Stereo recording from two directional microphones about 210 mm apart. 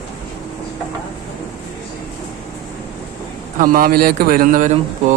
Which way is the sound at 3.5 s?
40° right (ahead or behind).